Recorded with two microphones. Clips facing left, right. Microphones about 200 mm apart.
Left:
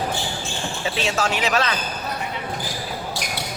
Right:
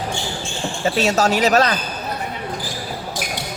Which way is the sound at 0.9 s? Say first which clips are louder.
Right 6 dB; 40° right (ahead or behind).